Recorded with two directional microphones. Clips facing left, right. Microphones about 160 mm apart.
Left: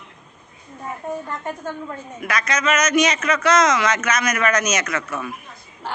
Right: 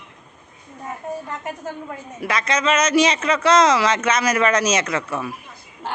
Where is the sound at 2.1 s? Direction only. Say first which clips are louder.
Right 2 dB; 30° right (ahead or behind).